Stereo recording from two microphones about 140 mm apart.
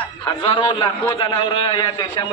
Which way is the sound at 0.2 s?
35° left (ahead or behind).